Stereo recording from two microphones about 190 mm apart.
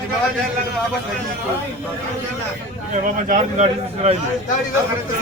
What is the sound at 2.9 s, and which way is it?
A man's voice, 40° right (ahead or behind).